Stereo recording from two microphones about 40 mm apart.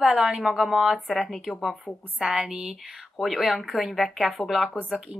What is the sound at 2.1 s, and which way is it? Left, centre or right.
Speech, centre.